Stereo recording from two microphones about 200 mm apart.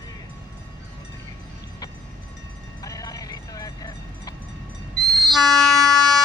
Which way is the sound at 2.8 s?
15° left (ahead or behind).